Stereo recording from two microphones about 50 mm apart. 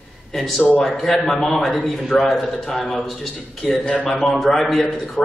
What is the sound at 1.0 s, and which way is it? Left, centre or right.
A man's voice, centre.